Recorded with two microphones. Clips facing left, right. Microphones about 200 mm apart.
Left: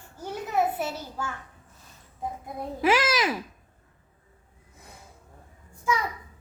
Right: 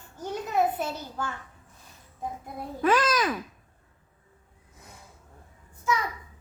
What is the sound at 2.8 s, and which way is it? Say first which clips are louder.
Speech: even; 10° left (ahead or behind).